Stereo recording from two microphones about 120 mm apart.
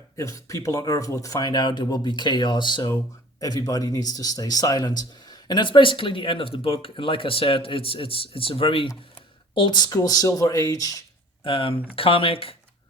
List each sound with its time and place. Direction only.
0.2 s speech: 25° left (ahead or behind); by 8.9 s 50° left (ahead or behind)
9.6 s speech: 40° left (ahead or behind)
11.4 s speech: 45° left (ahead or behind)